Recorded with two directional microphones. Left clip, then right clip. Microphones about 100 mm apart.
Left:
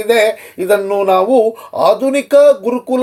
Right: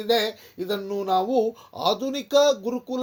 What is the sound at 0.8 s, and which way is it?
Speech, 55° right (ahead or behind).